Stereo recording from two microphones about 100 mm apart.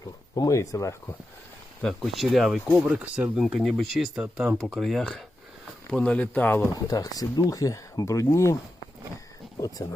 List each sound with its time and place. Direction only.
0.3 s speech: 35° left (ahead or behind)
1.8 s speech: centre (ahead or behind); by 6.7 s 20° left (ahead or behind)
6.7 s speech: 40° left (ahead or behind)
9.6 s speech: 40° left (ahead or behind)